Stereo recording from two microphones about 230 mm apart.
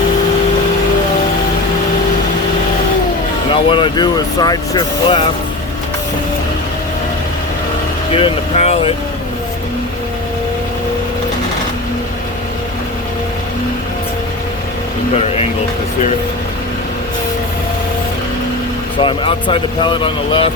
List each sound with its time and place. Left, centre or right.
3.5 s speech: left
8.1 s speech: left
18.9 s speech: left